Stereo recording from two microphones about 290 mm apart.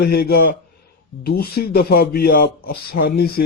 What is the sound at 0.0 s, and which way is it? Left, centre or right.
Speech, left.